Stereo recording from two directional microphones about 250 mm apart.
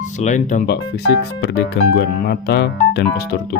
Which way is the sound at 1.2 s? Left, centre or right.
Left.